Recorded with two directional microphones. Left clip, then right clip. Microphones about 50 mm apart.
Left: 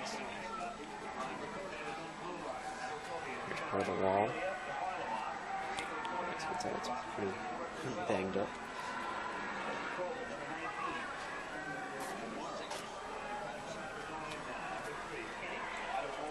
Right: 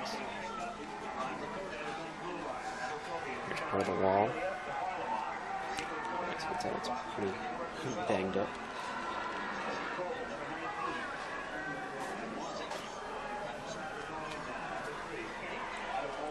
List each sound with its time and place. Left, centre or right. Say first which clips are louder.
3.7 s speech: right 3 dB; centre
6.1 s a sound: right 3 dB; centre
8.1 s speech: right 3 dB; centre